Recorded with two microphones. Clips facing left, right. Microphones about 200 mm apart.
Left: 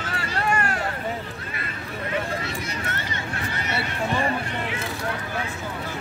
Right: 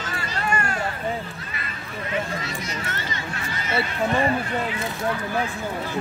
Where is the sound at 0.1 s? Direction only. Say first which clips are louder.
Left 2 dB; 55° left (ahead or behind).